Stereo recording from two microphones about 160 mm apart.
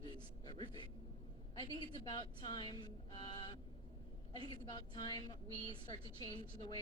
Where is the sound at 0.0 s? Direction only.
30° left (ahead or behind).